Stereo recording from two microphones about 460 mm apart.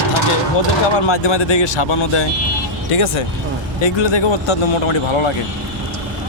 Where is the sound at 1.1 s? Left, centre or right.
Left.